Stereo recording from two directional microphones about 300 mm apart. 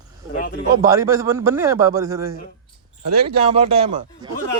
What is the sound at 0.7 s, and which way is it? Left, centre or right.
A man's voice, centre.